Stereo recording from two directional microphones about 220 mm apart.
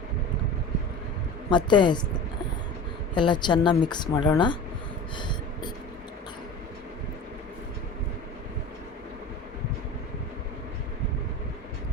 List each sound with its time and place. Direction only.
1.5 s speech: 20° left (ahead or behind)
3.2 s speech: 20° left (ahead or behind)